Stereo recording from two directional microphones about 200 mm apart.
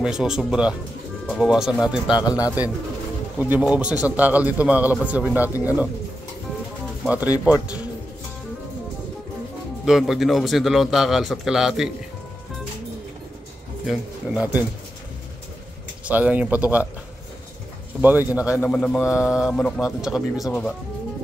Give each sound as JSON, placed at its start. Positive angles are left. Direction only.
{"t": 0.0, "sound": "a man's voice", "side_deg": -5}
{"t": 2.1, "sound": "speech", "side_deg": 20}
{"t": 3.3, "sound": "a man's voice", "side_deg": -5}
{"t": 7.0, "sound": "a man's voice", "side_deg": -5}
{"t": 9.8, "sound": "a man's voice", "side_deg": 0}
{"t": 13.8, "sound": "a man's voice", "side_deg": -5}
{"t": 16.1, "sound": "a man's voice", "side_deg": -10}
{"t": 18.0, "sound": "a man's voice", "side_deg": -10}
{"t": 18.5, "sound": "a man's voice", "side_deg": 5}